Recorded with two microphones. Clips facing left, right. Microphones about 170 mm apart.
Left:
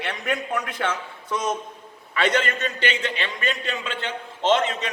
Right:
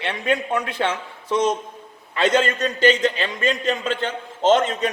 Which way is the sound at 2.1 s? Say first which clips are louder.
Right 4 dB; 25° right (ahead or behind).